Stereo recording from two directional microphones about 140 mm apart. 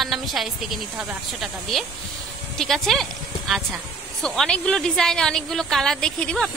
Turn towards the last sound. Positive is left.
turn(degrees=5)  # may be behind; listen again after turning